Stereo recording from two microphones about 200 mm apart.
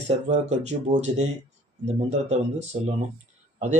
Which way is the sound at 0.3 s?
35° right (ahead or behind).